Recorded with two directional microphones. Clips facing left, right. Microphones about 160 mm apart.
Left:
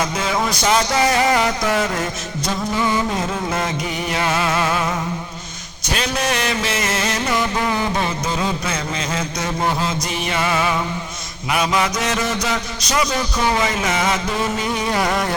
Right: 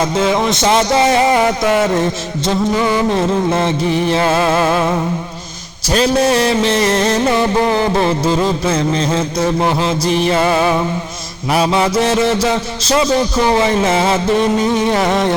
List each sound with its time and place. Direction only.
0.0 s speech: 25° right (ahead or behind)
3.2 s speech: 30° right (ahead or behind)
5.9 s music: 30° right (ahead or behind)
11.5 s speech: 30° right (ahead or behind)